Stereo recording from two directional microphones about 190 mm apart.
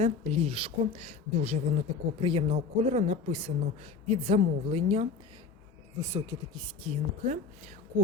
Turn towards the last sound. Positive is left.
turn(degrees=-40)  # may be behind; listen again after turning